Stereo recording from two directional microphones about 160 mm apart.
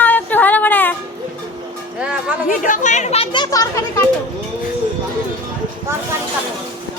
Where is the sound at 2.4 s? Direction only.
55° left (ahead or behind); by 3.8 s 20° left (ahead or behind).